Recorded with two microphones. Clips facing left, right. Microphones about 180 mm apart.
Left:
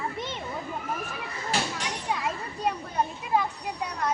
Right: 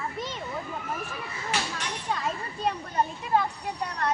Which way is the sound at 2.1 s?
10° left (ahead or behind).